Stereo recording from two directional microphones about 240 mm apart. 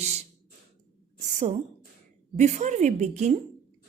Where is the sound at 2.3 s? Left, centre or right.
Right.